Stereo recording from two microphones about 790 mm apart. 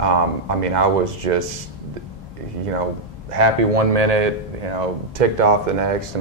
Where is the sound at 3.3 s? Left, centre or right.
Right.